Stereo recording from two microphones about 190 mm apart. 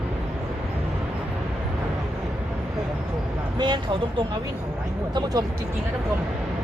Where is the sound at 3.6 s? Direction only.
25° right (ahead or behind).